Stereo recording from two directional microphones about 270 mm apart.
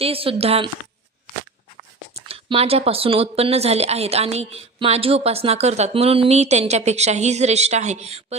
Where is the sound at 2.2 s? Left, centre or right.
Right.